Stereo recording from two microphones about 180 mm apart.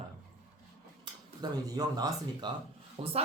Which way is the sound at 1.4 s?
20° right (ahead or behind).